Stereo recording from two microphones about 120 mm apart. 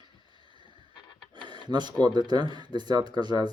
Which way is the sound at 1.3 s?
40° right (ahead or behind).